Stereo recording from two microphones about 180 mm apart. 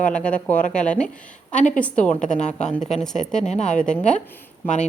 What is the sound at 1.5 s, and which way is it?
Speech, 45° left (ahead or behind).